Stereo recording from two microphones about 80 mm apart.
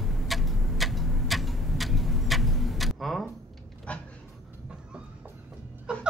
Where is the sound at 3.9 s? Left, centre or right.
Centre.